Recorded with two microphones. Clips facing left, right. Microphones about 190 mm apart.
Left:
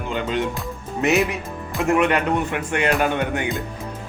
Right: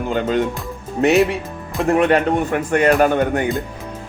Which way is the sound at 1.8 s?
35° right (ahead or behind).